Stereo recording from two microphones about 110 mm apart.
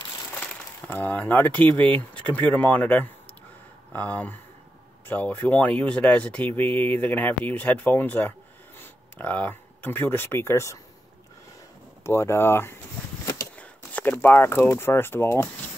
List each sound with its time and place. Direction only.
0.8 s speech: 15° left (ahead or behind)
12.0 s speech: 20° left (ahead or behind)
13.2 s a sound: 30° left (ahead or behind)
13.6 s speech: 15° left (ahead or behind)